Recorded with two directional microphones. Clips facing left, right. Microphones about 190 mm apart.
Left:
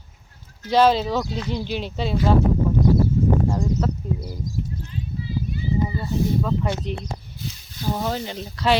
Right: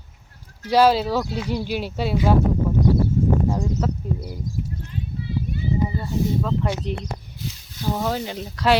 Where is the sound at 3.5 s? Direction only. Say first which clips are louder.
Even; centre (ahead or behind).